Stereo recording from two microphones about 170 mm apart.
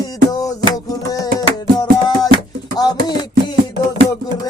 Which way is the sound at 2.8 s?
25° left (ahead or behind).